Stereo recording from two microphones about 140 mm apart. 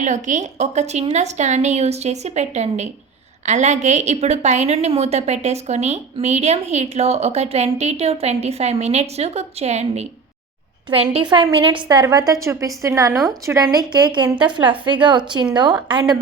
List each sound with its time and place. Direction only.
0.0 s a woman's voice: 60° right (ahead or behind)
11.3 s a woman's voice: 35° right (ahead or behind)